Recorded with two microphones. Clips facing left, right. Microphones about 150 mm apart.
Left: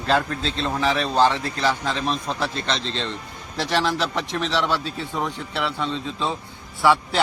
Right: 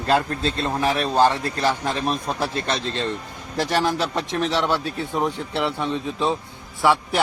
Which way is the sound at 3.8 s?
15° right (ahead or behind).